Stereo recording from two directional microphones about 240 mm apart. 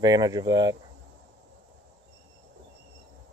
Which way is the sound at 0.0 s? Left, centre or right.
Centre.